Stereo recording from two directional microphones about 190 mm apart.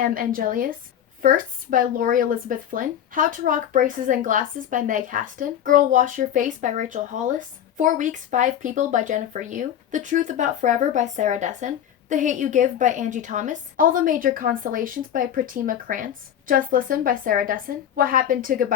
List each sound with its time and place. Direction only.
0.0 s speech: 45° right (ahead or behind)